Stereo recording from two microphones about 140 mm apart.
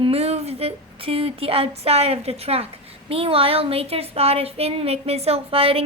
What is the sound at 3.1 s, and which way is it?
A woman's voice, 40° right (ahead or behind).